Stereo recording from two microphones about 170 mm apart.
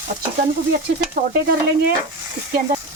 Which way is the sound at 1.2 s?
55° right (ahead or behind).